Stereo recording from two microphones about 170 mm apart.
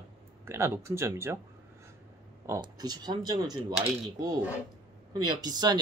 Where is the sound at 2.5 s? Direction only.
25° right (ahead or behind).